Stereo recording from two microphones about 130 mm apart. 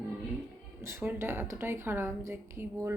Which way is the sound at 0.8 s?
20° right (ahead or behind).